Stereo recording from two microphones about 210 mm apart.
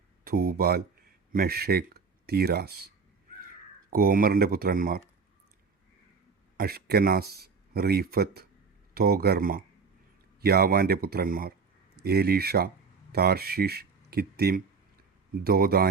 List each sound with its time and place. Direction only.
0.3 s speech: 45° right (ahead or behind)
3.8 s speech: 45° right (ahead or behind)
6.6 s speech: 45° right (ahead or behind)